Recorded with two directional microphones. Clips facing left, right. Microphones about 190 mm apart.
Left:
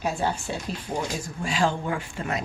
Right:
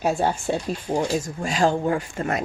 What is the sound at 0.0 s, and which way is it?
A woman's voice, 45° right (ahead or behind).